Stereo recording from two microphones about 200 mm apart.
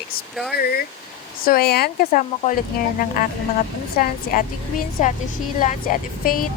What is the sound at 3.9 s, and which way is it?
A woman's voice, 45° left (ahead or behind).